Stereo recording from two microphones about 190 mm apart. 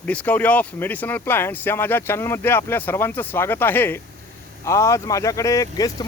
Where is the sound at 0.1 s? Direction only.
10° left (ahead or behind).